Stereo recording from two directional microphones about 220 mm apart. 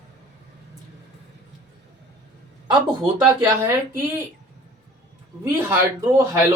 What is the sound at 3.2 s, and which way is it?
Speech, 10° right (ahead or behind).